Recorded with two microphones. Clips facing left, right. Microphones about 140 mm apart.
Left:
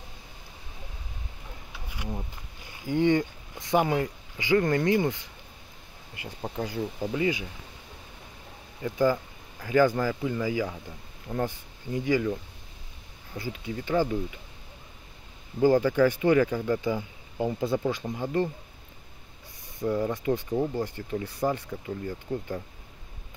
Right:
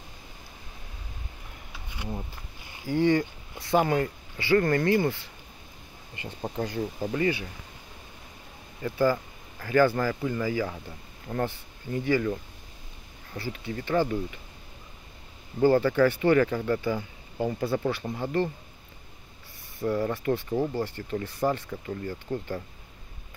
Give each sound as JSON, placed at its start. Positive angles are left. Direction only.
{"t": 2.9, "sound": "speech", "side_deg": 20}
{"t": 6.6, "sound": "speech", "side_deg": -10}
{"t": 7.1, "sound": "speech", "side_deg": 10}
{"t": 8.8, "sound": "speech", "side_deg": 15}
{"t": 15.6, "sound": "speech", "side_deg": 10}
{"t": 19.8, "sound": "speech", "side_deg": 15}
{"t": 20.5, "sound": "speech", "side_deg": -5}
{"t": 20.8, "sound": "speech", "side_deg": 10}